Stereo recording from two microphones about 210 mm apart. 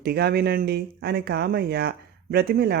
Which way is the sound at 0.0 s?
50° right (ahead or behind).